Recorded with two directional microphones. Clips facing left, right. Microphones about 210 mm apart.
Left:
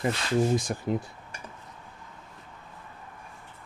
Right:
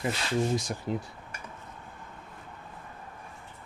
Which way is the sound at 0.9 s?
55° left (ahead or behind).